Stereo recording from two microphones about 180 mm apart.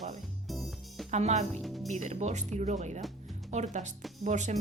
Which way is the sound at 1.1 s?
40° right (ahead or behind).